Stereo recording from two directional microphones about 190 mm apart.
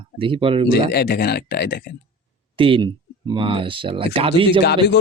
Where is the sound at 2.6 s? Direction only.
25° right (ahead or behind).